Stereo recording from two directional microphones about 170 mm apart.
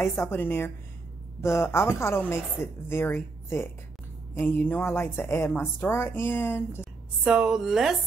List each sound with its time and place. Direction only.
0.0 s a woman's voice: 15° left (ahead or behind)
6.8 s a woman's voice: 5° right (ahead or behind)